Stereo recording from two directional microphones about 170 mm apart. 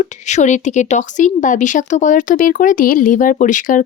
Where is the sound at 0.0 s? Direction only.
45° left (ahead or behind).